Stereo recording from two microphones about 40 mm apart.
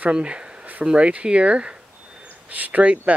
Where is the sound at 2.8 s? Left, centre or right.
Right.